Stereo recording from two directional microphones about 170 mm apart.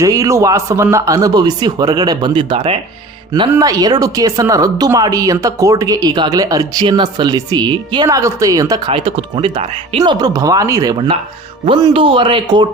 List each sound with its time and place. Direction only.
0.0 s speech: 20° right (ahead or behind)
8.9 s speech: 35° right (ahead or behind)